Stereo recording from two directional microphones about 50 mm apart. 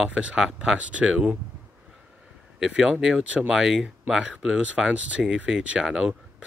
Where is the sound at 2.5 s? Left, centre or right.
Centre.